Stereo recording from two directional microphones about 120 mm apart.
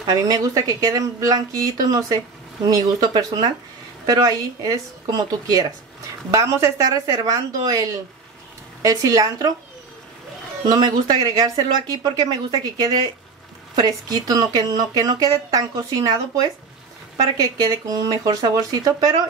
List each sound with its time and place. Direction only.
0.0 s speech: 30° right (ahead or behind)
10.7 s speech: 35° right (ahead or behind)